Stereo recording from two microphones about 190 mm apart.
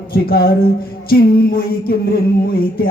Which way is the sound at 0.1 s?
55° left (ahead or behind).